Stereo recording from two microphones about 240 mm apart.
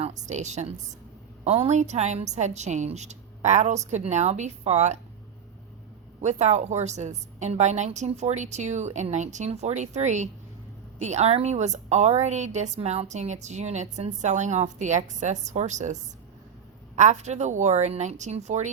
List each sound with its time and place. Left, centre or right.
0.0 s a woman's voice: right
6.2 s a woman's voice: right